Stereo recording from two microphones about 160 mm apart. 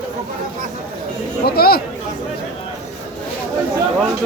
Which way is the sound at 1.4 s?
75° left (ahead or behind).